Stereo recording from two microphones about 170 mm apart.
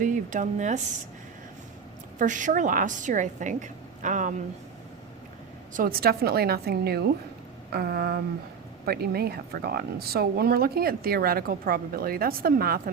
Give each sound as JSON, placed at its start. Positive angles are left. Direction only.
{"t": 0.0, "sound": "speech", "side_deg": -50}
{"t": 2.1, "sound": "a woman's voice", "side_deg": -50}
{"t": 5.7, "sound": "speech", "side_deg": -60}